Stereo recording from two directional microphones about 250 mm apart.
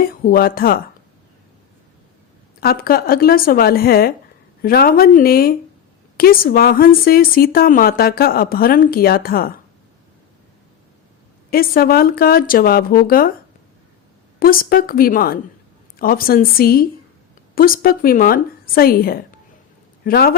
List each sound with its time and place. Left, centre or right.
0.0 s speech: left
2.6 s speech: left
11.5 s speech: left
14.3 s speech: left